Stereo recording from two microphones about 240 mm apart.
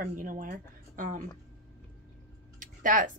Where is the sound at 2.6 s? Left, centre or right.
Right.